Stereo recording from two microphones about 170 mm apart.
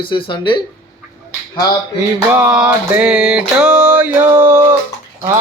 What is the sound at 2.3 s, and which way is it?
Music, 10° right (ahead or behind).